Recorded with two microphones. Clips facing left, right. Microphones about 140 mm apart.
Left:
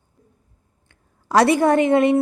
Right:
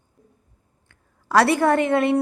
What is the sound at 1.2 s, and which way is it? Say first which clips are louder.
Speech: left 2 dB; 15° left (ahead or behind).